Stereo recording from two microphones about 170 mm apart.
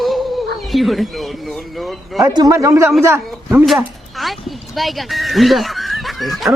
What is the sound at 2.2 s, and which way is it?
Speech, 25° right (ahead or behind).